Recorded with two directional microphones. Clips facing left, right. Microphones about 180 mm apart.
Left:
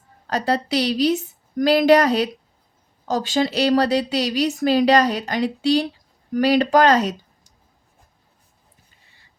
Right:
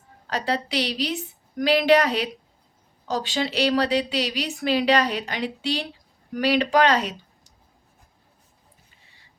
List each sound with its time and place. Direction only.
0.3 s speech: 45° left (ahead or behind)